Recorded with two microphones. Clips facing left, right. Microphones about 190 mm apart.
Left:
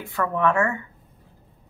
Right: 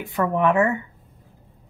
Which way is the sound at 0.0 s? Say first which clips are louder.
Right 2 dB; 20° right (ahead or behind).